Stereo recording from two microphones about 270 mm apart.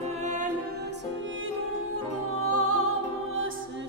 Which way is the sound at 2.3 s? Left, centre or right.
Right.